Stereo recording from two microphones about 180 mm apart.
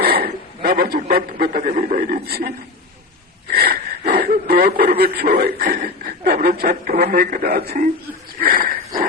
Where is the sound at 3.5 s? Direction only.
60° right (ahead or behind).